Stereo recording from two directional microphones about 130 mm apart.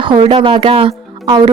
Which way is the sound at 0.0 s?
45° right (ahead or behind).